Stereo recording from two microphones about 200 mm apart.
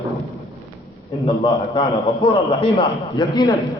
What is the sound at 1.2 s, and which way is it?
A man's voice, 30° left (ahead or behind).